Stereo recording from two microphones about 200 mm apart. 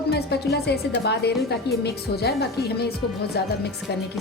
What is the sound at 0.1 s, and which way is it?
Speech, 55° left (ahead or behind).